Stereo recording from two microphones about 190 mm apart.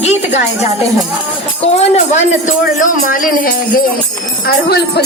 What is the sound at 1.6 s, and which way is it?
A man's voice, 35° left (ahead or behind).